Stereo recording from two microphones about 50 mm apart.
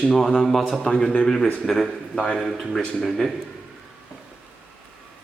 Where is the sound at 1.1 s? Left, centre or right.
Centre.